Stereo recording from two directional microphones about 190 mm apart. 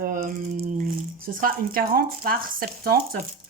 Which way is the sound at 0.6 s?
40° right (ahead or behind).